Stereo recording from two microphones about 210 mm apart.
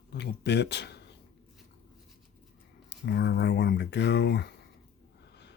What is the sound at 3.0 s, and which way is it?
Speech, 55° left (ahead or behind).